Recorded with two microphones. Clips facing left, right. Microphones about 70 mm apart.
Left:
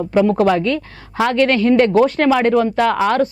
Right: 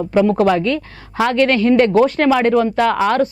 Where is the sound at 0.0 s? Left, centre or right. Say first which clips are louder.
Even; right.